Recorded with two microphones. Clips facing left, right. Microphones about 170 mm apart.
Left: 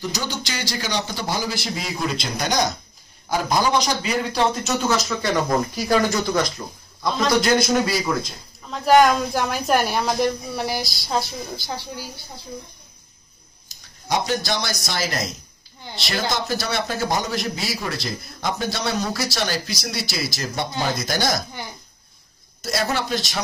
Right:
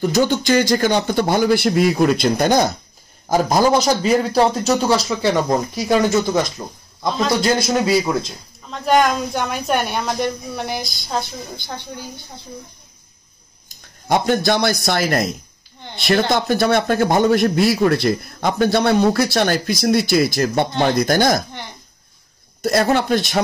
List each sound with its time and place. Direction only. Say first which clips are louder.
0.0 s a man's voice: right 11 dB; 55° right (ahead or behind)
3.3 s a man's voice: right 6 dB; 40° right (ahead or behind); by 8.0 s 25° right (ahead or behind)
8.6 s speech: left 1 dB; centre (ahead or behind)
13.7 s a man's voice: right 6 dB; 55° right (ahead or behind)
22.6 s a man's voice: right 8 dB; 55° right (ahead or behind)